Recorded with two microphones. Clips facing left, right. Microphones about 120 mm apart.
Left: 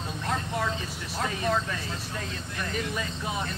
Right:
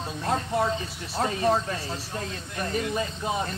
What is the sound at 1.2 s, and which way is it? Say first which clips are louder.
A man's voice: right 4 dB; 35° right (ahead or behind).